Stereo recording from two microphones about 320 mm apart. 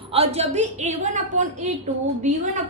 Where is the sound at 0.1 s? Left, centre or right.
Centre.